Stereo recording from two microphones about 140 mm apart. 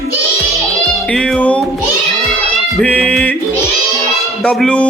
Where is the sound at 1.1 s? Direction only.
5° left (ahead or behind).